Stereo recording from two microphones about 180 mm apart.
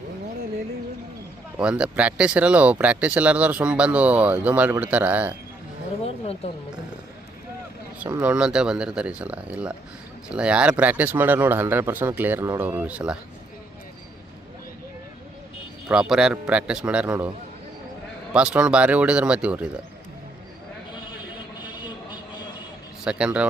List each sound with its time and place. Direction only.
1.5 s speech: 5° right (ahead or behind)
6.1 s a sound: 35° left (ahead or behind)
8.2 s speech: 5° right (ahead or behind)
15.9 s speech: 5° right (ahead or behind)
18.3 s speech: 5° right (ahead or behind)
21.6 s vehicle: 25° left (ahead or behind)
23.0 s speech: 5° right (ahead or behind)